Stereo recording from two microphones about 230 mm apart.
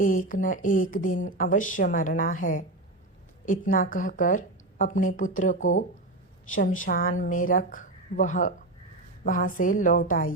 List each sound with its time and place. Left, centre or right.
0.0 s speech: left
6.7 s speech: left